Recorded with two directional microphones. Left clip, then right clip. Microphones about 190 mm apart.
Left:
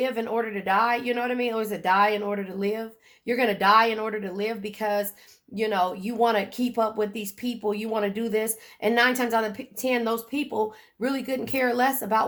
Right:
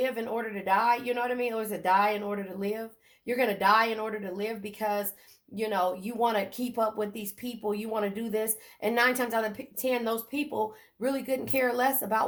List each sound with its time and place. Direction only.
0.0 s speech: 30° left (ahead or behind)